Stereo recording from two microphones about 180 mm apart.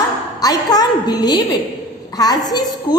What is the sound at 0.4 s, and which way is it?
A woman's voice, 20° left (ahead or behind).